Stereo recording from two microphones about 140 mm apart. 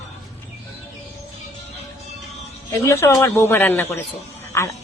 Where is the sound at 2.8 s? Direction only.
20° left (ahead or behind).